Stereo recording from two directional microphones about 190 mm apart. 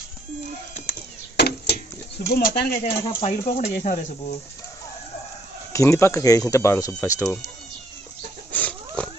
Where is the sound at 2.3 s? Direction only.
60° left (ahead or behind).